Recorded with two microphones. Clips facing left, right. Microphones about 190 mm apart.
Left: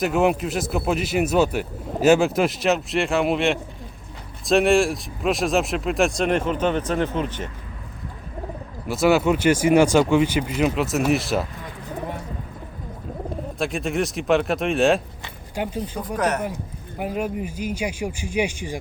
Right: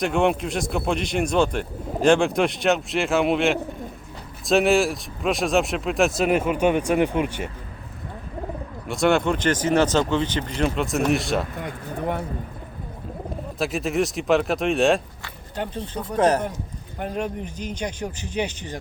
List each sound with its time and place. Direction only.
0.0 s speech: 5° left (ahead or behind)
8.9 s speech: 5° left (ahead or behind)
11.6 s bird: 65° right (ahead or behind)
13.6 s speech: centre (ahead or behind)
15.2 s a sound: 10° left (ahead or behind)
16.0 s speech: 30° right (ahead or behind)
17.0 s speech: 5° left (ahead or behind)